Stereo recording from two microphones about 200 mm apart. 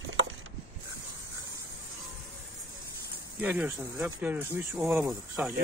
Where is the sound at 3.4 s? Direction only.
10° right (ahead or behind).